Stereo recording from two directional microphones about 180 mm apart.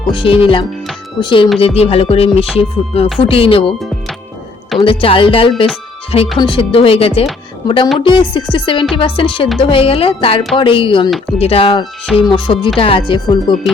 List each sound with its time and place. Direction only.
0.1 s music: 30° left (ahead or behind)
4.8 s music: 30° left (ahead or behind)